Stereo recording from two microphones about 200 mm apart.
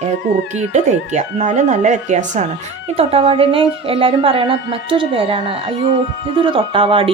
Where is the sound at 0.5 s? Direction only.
35° right (ahead or behind).